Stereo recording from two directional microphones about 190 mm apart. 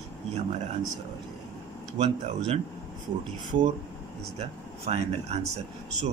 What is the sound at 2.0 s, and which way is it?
Speech, 35° right (ahead or behind).